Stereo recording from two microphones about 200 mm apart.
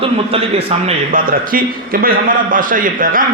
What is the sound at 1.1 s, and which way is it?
A man's voice, 45° right (ahead or behind).